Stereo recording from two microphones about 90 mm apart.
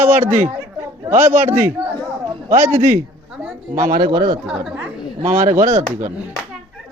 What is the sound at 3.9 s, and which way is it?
Speech, 50° right (ahead or behind).